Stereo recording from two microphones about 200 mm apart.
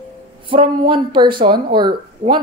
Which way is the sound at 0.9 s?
25° right (ahead or behind).